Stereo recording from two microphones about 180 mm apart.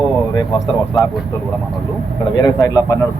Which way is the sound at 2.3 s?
20° left (ahead or behind).